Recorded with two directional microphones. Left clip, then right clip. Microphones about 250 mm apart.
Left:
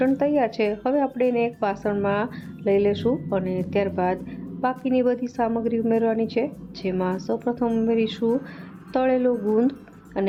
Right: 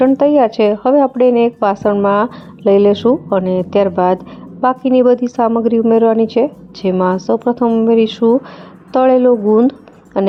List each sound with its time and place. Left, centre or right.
0.2 s a woman's voice: right